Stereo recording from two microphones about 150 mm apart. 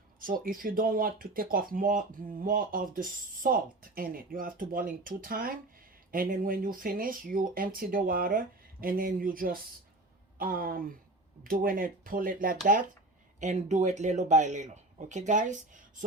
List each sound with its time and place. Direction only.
0.2 s speech: 70° right (ahead or behind)
13.4 s speech: 50° right (ahead or behind)